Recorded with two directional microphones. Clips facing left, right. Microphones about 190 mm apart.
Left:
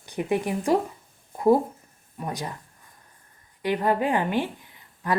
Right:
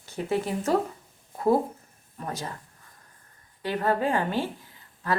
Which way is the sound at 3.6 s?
15° left (ahead or behind).